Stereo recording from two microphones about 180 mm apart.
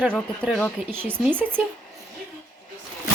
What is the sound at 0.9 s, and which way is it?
Speech, 10° right (ahead or behind).